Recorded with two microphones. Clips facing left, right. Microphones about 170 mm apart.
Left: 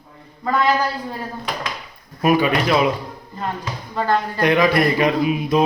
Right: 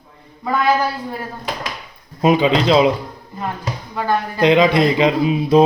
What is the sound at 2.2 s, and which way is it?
Speech, 20° right (ahead or behind).